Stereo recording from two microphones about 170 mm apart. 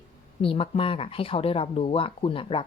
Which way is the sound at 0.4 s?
35° left (ahead or behind).